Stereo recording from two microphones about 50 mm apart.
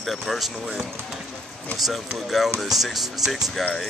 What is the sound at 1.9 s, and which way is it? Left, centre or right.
Speech, centre.